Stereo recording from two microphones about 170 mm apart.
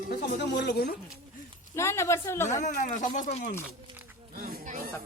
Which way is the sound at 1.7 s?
15° left (ahead or behind).